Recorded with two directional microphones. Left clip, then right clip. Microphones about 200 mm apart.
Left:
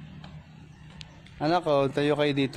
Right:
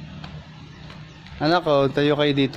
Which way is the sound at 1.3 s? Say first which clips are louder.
Right 5 dB; 20° left (ahead or behind).